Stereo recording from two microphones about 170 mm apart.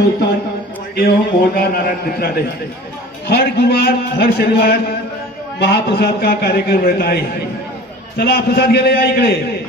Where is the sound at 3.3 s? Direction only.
75° left (ahead or behind).